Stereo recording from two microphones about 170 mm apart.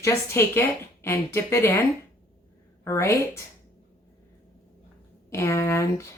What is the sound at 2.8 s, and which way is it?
Speech, 15° left (ahead or behind).